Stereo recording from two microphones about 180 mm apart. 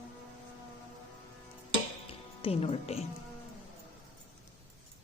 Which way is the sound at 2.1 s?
30° left (ahead or behind).